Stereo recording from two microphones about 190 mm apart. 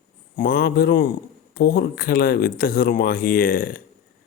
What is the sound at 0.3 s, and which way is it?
Speech, 50° left (ahead or behind).